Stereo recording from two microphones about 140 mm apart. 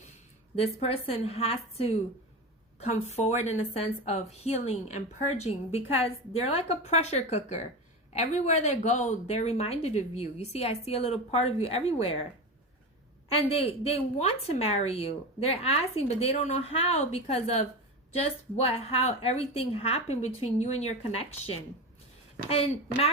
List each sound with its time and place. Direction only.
0.5 s a woman's voice: 45° left (ahead or behind)
13.2 s a woman's voice: 45° left (ahead or behind)